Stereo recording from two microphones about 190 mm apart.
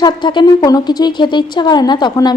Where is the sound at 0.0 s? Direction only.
25° left (ahead or behind).